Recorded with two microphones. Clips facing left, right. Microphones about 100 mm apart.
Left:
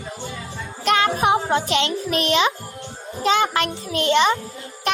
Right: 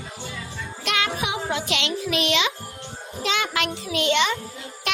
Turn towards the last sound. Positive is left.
turn(degrees=40)  # may be behind; listen again after turning